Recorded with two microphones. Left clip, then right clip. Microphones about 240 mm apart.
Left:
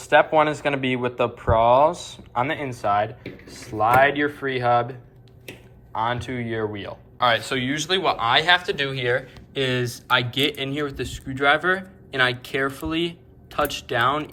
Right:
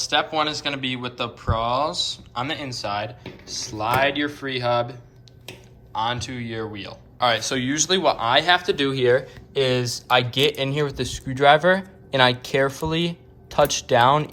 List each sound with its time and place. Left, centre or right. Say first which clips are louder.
0.0 s speech: left 5 dB; centre